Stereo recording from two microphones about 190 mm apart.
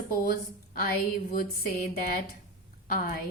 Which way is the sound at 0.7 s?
50° left (ahead or behind).